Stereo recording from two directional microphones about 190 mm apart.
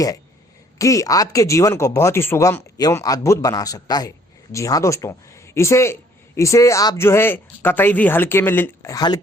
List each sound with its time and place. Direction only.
0.8 s a man's voice: 15° left (ahead or behind)